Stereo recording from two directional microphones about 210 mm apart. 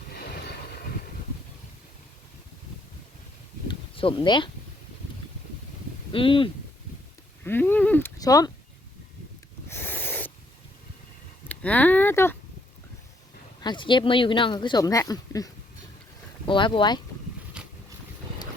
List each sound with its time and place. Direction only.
3.7 s a sound: 25° left (ahead or behind)
6.1 s speech: 25° left (ahead or behind)
7.4 s speech: 10° left (ahead or behind)
9.6 s a sound: 10° left (ahead or behind)
11.4 s speech: 5° left (ahead or behind)
13.6 s speech: 20° left (ahead or behind)
17.6 s boat: 5° right (ahead or behind)